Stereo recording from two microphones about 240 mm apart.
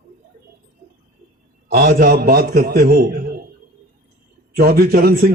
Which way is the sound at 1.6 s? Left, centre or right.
Right.